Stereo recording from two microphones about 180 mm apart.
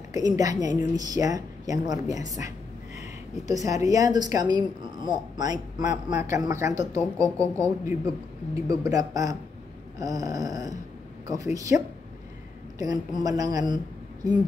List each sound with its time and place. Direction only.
0.1 s a woman's voice: 20° right (ahead or behind)
3.6 s a woman's voice: 20° right (ahead or behind)